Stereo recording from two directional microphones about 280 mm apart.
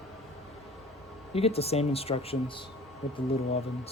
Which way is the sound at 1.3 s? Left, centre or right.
Left.